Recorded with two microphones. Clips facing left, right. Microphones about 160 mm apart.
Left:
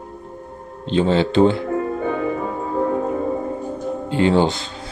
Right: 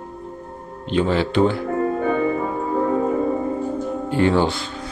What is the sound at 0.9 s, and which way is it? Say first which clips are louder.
Speech: left 2 dB; 25° left (ahead or behind).